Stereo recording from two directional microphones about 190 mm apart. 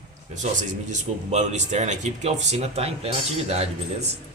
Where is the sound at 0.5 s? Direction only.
40° right (ahead or behind).